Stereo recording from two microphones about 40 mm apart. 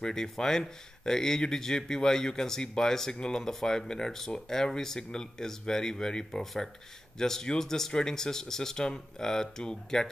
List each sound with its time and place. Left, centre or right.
0.0 s speech: centre
6.4 s speech: centre